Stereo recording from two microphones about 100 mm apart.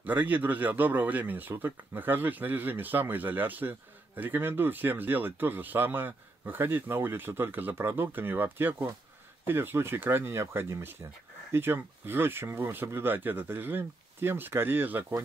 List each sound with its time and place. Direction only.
0.0 s speech: 20° right (ahead or behind)